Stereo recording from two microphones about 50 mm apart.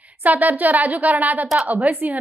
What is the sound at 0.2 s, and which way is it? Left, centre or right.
A woman's voice, right.